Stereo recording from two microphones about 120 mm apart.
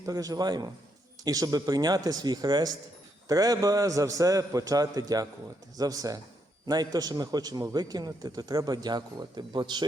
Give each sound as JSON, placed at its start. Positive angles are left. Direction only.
{"t": 0.0, "sound": "a man's voice", "side_deg": -30}